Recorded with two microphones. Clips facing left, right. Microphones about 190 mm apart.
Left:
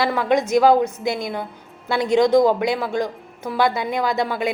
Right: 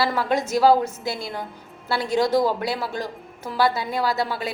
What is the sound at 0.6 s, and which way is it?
Speech, 20° left (ahead or behind).